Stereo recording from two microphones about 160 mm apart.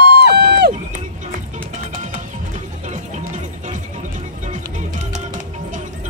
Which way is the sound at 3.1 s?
50° right (ahead or behind).